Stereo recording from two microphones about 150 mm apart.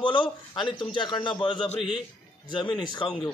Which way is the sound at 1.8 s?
5° right (ahead or behind).